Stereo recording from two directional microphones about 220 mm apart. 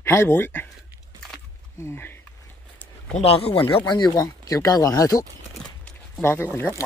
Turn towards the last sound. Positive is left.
turn(degrees=10)  # may be behind; listen again after turning